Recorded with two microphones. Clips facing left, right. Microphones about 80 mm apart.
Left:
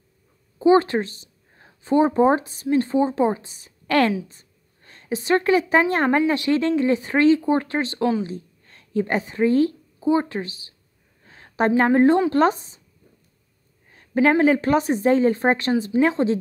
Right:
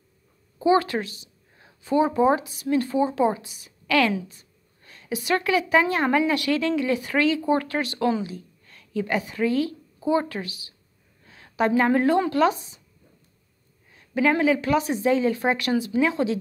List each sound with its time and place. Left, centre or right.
0.6 s a woman's voice: left
6.1 s a woman's voice: left
9.9 s speech: left
11.2 s a sound: left
11.9 s speech: left
13.9 s a sound: left
14.3 s speech: left